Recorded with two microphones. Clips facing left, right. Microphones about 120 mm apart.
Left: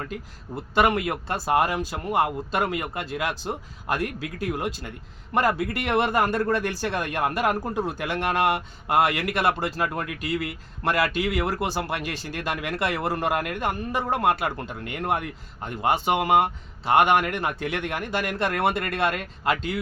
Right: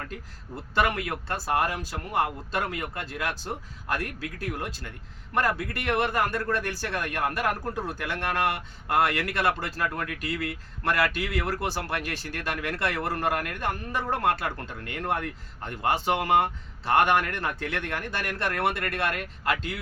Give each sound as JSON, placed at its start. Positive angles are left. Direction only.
{"t": 0.1, "sound": "a man's voice", "side_deg": 20}